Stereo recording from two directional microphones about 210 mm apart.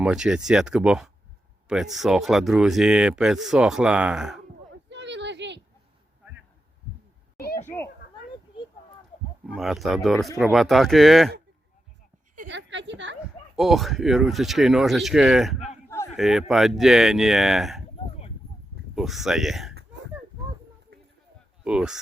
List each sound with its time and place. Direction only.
0.0 s speech: 5° right (ahead or behind)
4.7 s a sound: 55° right (ahead or behind)
6.2 s heart sounds: 10° right (ahead or behind)
7.6 s children playing: 10° left (ahead or behind)
9.5 s speech: centre (ahead or behind)
12.5 s a woman's voice: 60° right (ahead or behind)
13.6 s speech: centre (ahead or behind)
18.9 s speech: centre (ahead or behind)
21.6 s speech: 5° right (ahead or behind)